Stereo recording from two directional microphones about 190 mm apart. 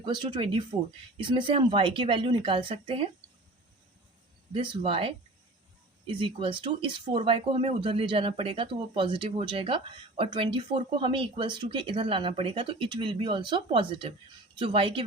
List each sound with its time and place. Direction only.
0.0 s speech: 25° right (ahead or behind)
4.5 s speech: 25° right (ahead or behind)